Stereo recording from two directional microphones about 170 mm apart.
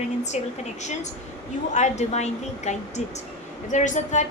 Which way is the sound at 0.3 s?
40° left (ahead or behind).